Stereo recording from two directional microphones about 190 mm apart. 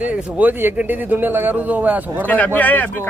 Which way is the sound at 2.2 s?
10° left (ahead or behind).